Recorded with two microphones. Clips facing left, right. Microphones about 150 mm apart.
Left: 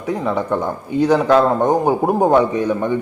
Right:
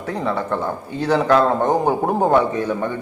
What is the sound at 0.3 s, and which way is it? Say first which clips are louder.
A man's voice: left 2 dB; 15° left (ahead or behind).